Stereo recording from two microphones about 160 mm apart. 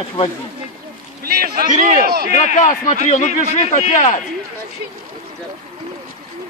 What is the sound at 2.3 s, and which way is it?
A man's voice, 50° left (ahead or behind).